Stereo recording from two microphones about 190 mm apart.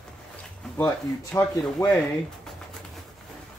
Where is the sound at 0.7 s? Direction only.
10° left (ahead or behind).